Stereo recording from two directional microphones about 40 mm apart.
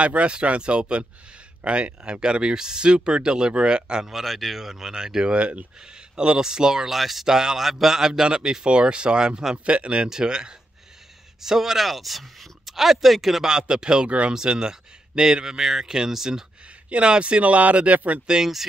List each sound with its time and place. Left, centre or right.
0.0 s speech: right
4.0 s a man's voice: centre; by 10.0 s right
10.0 s speech: centre
11.4 s speech: centre
13.5 s a man's voice: centre
16.9 s speech: right
18.2 s speech: centre